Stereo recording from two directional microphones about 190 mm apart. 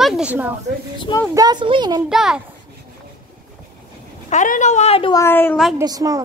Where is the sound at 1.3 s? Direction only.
20° right (ahead or behind).